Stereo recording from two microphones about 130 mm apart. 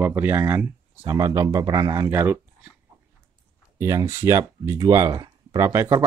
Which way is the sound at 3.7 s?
20° right (ahead or behind).